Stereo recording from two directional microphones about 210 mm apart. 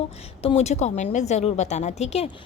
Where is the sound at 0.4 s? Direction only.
30° left (ahead or behind).